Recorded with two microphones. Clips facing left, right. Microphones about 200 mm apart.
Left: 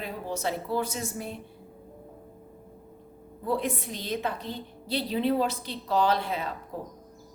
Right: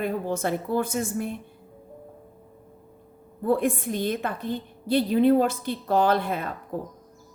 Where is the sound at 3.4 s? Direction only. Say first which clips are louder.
Right 6 dB; 50° right (ahead or behind).